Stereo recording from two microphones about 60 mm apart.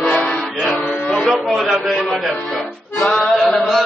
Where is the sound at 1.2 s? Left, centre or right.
Centre.